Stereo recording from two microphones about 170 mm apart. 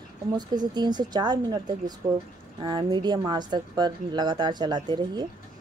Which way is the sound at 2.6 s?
25° right (ahead or behind).